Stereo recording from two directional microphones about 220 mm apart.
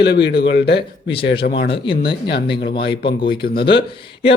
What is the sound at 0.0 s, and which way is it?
Speech, 50° left (ahead or behind).